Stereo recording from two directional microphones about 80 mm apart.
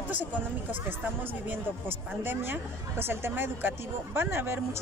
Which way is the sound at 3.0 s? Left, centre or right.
Right.